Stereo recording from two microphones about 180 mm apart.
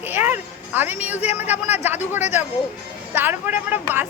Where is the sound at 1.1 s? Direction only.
40° left (ahead or behind).